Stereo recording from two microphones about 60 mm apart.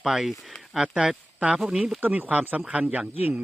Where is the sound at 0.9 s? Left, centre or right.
Centre.